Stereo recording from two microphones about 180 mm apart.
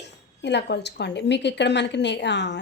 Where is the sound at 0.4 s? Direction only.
70° left (ahead or behind).